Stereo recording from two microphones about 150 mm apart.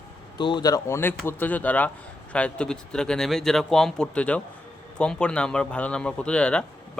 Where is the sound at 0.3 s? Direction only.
30° left (ahead or behind).